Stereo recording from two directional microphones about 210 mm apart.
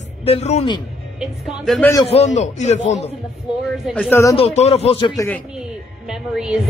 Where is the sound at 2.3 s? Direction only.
35° left (ahead or behind).